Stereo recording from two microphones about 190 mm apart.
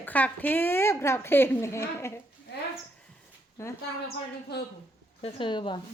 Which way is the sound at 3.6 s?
15° left (ahead or behind).